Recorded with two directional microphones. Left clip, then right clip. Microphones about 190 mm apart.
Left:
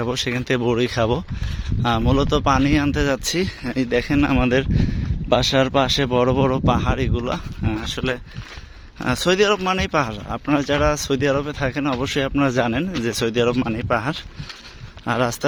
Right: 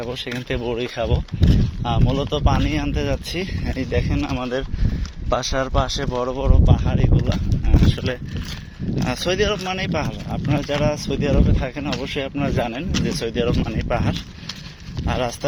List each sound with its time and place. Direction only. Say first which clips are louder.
0.0 s speech: left 4 dB; 45° left (ahead or behind)
4.1 s speech: left 6 dB; 45° left (ahead or behind)